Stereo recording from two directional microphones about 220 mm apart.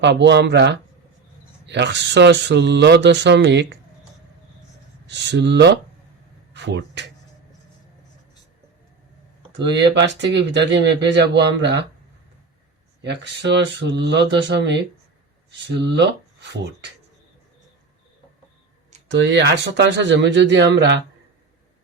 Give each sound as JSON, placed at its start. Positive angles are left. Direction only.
{"t": 0.0, "sound": "speech", "side_deg": -50}
{"t": 5.0, "sound": "speech", "side_deg": -50}
{"t": 9.5, "sound": "speech", "side_deg": -55}
{"t": 13.0, "sound": "speech", "side_deg": -50}
{"t": 19.0, "sound": "speech", "side_deg": -55}